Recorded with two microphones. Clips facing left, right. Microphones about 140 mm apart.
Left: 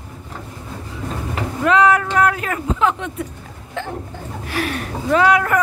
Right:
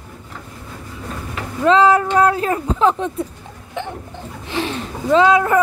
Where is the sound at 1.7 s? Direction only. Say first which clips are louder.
Right 2 dB; 30° right (ahead or behind).